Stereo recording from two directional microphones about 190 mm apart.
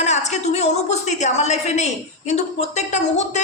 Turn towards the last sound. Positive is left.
turn(degrees=40)  # may be behind; listen again after turning